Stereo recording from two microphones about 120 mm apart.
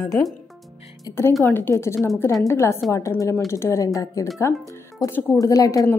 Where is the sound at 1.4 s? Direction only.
15° left (ahead or behind).